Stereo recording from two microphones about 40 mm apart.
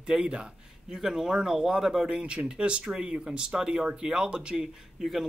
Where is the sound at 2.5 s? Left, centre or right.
Right.